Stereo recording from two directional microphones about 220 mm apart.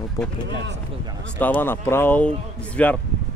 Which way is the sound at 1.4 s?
10° left (ahead or behind).